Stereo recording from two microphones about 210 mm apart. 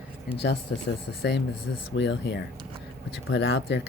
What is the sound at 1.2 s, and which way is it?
Speech, 55° left (ahead or behind).